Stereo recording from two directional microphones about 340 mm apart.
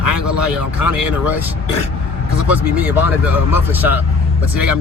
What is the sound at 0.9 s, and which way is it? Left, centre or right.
Speech, left.